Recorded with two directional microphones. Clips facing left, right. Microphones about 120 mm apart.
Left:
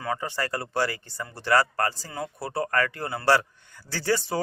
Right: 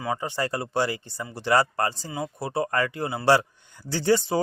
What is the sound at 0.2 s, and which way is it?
Speech, 20° right (ahead or behind).